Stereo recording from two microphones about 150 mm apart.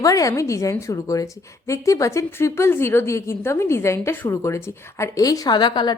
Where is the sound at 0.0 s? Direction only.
25° left (ahead or behind).